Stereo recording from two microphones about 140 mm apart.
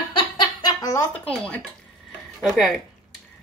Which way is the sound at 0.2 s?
30° left (ahead or behind).